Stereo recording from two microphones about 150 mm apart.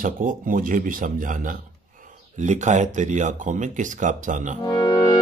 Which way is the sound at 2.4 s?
55° right (ahead or behind).